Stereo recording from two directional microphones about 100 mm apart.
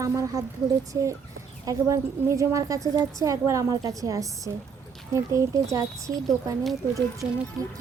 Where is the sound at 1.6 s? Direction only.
35° right (ahead or behind).